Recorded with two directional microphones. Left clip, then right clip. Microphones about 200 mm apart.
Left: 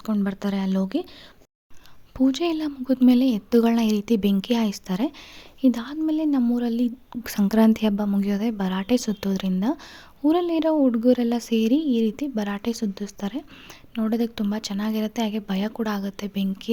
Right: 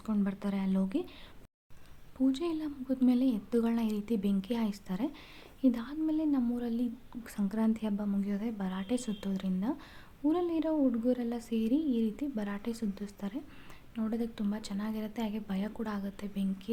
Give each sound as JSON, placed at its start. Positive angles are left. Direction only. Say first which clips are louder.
{"t": 0.0, "sound": "speech", "louder": "left 8 dB", "side_deg": 40}
{"t": 2.1, "sound": "a woman's voice", "louder": "left 9 dB", "side_deg": 40}